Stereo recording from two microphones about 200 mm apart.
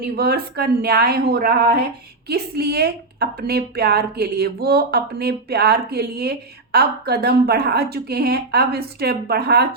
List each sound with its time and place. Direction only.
0.0 s a woman's voice: 50° right (ahead or behind)